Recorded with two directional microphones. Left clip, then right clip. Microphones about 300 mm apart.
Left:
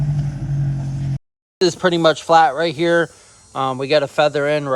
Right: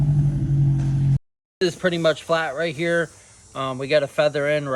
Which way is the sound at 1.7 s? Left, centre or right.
Centre.